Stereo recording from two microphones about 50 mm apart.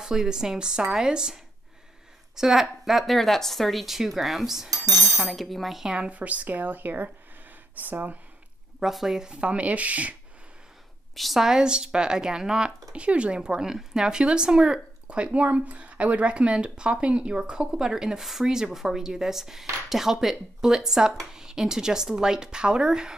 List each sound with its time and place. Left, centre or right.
0.0 s speech: centre
4.9 s speech: right
5.2 s speech: centre
5.9 s speech: right
8.7 s speech: centre
9.3 s speech: right
11.1 s speech: centre